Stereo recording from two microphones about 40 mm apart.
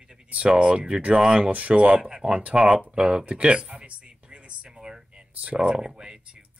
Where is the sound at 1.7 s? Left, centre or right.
Right.